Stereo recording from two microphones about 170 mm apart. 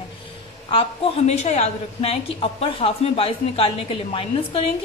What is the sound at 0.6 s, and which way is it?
A woman's voice, 35° left (ahead or behind).